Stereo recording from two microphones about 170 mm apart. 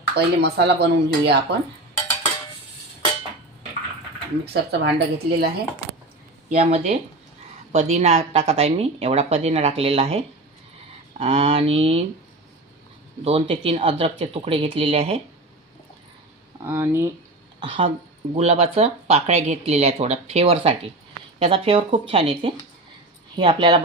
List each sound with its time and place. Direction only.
0.2 s speech: 75° right (ahead or behind)
4.5 s speech: 75° right (ahead or behind)
6.6 s a woman's voice: 35° right (ahead or behind)
13.2 s a woman's voice: 35° right (ahead or behind)
16.6 s speech: 15° right (ahead or behind)
17.6 s a woman's voice: 30° right (ahead or behind)